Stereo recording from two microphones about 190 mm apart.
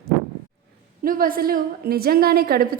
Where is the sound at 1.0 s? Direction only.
50° right (ahead or behind).